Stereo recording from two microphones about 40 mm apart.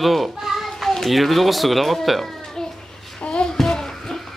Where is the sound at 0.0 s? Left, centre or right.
Centre.